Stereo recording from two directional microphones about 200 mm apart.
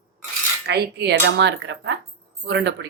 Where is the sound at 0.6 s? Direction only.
55° right (ahead or behind).